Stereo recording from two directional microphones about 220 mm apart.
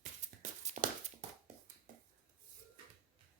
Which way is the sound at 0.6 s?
35° right (ahead or behind).